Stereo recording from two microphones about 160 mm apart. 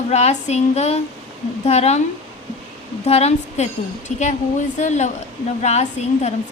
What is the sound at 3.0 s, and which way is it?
A woman's voice, 40° left (ahead or behind).